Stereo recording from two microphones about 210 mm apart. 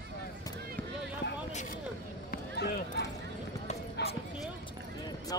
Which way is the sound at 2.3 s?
50° left (ahead or behind).